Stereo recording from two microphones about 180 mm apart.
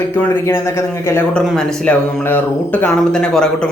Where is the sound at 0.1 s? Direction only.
10° left (ahead or behind).